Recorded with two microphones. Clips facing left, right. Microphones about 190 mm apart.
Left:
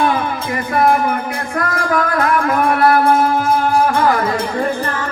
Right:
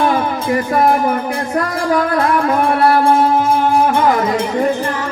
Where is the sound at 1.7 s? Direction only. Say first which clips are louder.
Right 1 dB; 30° right (ahead or behind).